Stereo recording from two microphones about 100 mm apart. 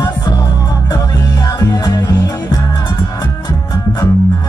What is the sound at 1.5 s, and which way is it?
Music, 40° left (ahead or behind).